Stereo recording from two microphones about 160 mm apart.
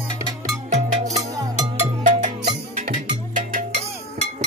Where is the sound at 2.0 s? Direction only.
50° right (ahead or behind).